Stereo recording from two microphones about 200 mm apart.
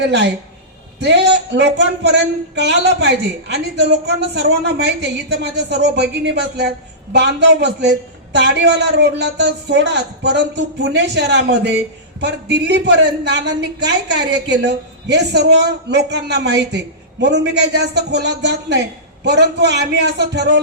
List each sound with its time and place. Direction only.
0.1 s speech: 60° right (ahead or behind)